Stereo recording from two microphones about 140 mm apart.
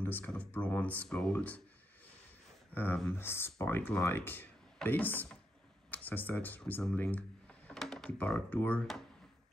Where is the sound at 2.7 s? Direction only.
15° left (ahead or behind).